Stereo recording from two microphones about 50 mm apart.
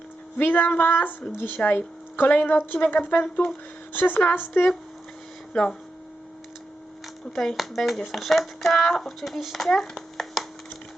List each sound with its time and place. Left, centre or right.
0.3 s a woman's voice: left
5.5 s speech: centre
7.3 s speech: centre
9.6 s a sound: centre